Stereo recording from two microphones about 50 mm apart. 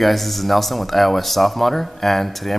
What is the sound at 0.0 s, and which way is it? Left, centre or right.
Speech, centre.